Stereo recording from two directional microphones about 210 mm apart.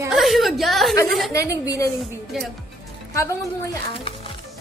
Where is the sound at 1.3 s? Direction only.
15° left (ahead or behind).